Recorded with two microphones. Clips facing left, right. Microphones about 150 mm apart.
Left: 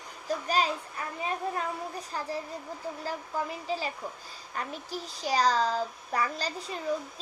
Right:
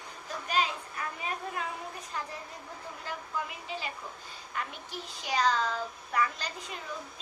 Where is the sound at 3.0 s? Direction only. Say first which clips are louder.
Left 3 dB; 35° left (ahead or behind).